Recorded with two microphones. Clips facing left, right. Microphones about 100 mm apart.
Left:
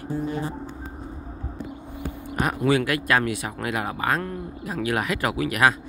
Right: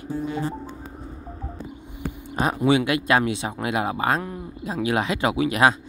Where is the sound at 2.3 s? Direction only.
25° right (ahead or behind).